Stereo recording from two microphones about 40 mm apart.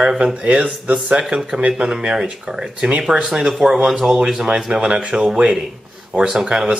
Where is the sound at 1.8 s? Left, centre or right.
Right.